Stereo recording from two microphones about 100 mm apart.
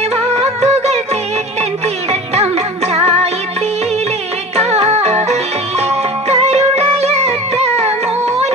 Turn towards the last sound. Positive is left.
turn(degrees=-90)